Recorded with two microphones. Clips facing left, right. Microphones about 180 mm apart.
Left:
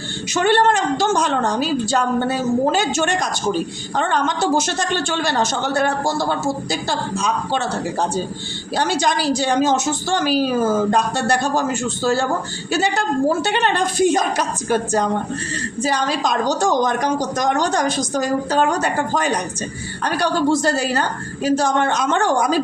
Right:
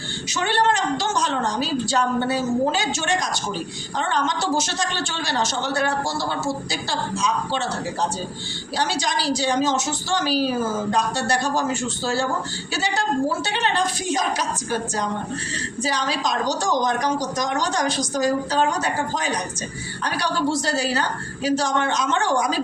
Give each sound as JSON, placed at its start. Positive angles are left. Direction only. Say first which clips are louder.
{"t": 0.3, "sound": "a woman's voice", "louder": "left 5 dB", "side_deg": 55}